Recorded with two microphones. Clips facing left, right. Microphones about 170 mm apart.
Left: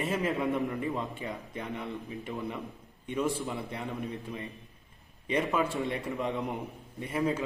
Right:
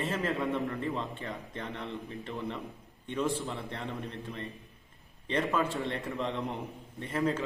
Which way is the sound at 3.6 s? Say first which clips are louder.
Left 2 dB; 10° left (ahead or behind).